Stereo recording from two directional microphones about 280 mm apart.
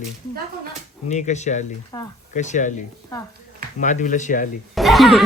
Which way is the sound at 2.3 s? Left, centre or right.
Left.